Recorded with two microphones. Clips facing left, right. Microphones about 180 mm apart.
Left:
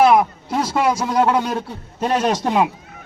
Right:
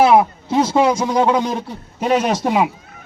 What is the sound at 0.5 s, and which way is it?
Speech, 20° right (ahead or behind).